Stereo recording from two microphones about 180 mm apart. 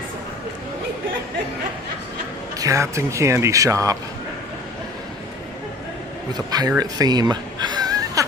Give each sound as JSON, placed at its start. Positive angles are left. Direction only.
{"t": 2.6, "sound": "speech", "side_deg": -15}
{"t": 6.3, "sound": "speech", "side_deg": -20}